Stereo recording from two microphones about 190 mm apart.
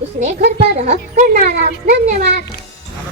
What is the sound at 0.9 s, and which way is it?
Speech, 45° right (ahead or behind).